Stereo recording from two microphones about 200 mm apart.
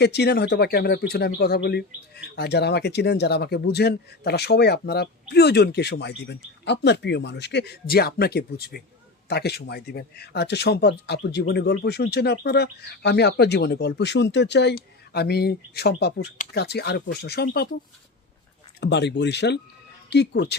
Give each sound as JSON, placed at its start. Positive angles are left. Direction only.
{"t": 0.0, "sound": "speech", "side_deg": 55}
{"t": 18.8, "sound": "speech", "side_deg": 60}